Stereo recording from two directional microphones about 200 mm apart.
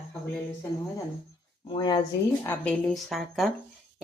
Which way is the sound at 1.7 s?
25° left (ahead or behind).